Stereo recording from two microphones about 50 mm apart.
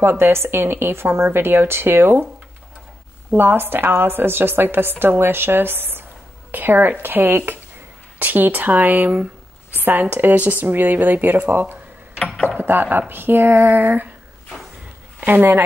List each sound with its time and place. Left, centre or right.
0.2 s a woman's voice: right
3.3 s a woman's voice: right
15.1 s speech: right